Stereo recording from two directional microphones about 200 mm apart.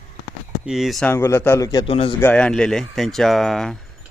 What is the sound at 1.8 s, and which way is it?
Speech, 30° left (ahead or behind).